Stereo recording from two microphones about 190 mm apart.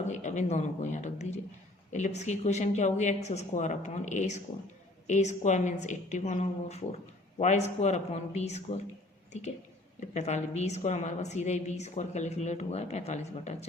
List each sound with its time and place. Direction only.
0.1 s a woman's voice: 40° left (ahead or behind)
10.0 s a woman's voice: 35° left (ahead or behind)